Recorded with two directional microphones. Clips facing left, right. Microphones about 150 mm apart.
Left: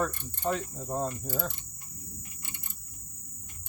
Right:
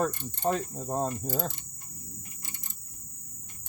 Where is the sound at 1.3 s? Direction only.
45° right (ahead or behind).